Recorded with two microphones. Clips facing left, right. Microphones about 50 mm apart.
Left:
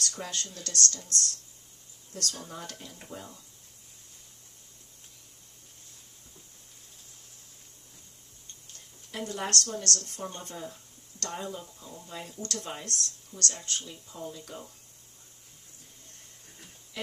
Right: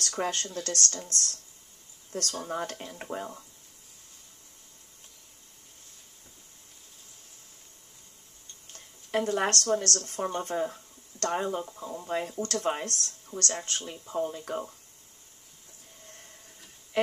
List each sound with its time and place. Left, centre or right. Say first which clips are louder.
0.0 s speech: right 5 dB; right
2.1 s speech: right 6 dB; right
8.7 s speech: right 10 dB; right
17.0 s speech: right 11 dB; right